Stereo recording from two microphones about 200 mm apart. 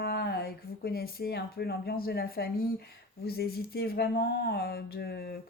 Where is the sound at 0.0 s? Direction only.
50° left (ahead or behind).